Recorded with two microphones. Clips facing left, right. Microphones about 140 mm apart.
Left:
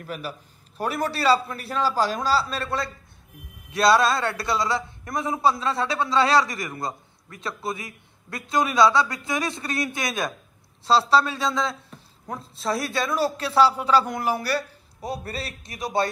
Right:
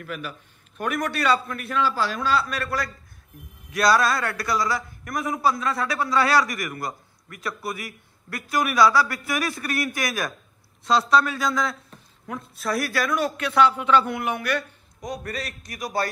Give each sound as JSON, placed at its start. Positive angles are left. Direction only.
{"t": 0.0, "sound": "a man's voice", "side_deg": 35}
{"t": 11.9, "sound": "a sound", "side_deg": 0}
{"t": 12.3, "sound": "a man's voice", "side_deg": 30}